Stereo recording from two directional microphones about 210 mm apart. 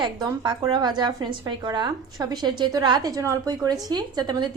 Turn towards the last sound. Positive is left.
turn(degrees=-20)  # may be behind; listen again after turning